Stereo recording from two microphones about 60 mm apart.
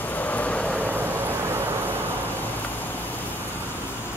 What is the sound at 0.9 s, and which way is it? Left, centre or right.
Vehicle, right.